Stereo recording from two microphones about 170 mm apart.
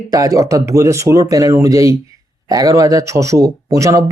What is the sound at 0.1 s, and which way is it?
Speech, 20° right (ahead or behind).